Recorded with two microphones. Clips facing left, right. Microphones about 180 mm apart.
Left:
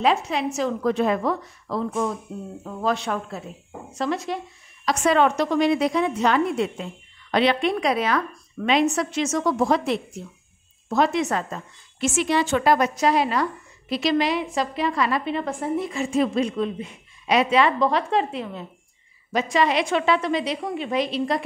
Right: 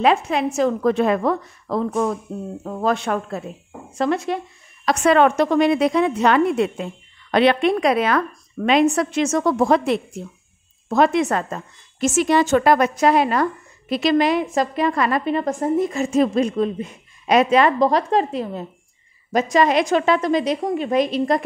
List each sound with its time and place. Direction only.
0.0 s a woman's voice: 55° right (ahead or behind)